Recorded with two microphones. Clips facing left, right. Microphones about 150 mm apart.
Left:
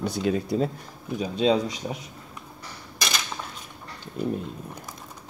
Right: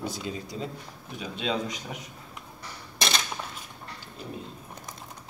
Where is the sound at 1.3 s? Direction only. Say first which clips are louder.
Left 8 dB; 35° left (ahead or behind).